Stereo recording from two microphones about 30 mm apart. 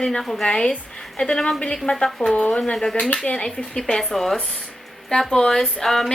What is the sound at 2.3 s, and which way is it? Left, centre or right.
Speech, left.